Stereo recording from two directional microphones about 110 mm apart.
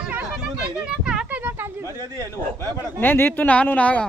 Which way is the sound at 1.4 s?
20° right (ahead or behind).